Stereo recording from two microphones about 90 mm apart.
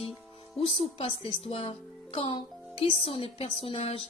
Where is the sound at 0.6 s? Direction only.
90° left.